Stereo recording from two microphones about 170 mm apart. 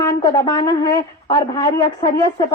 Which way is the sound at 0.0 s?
20° left (ahead or behind).